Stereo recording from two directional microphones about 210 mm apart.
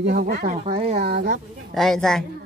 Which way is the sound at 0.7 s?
30° right (ahead or behind).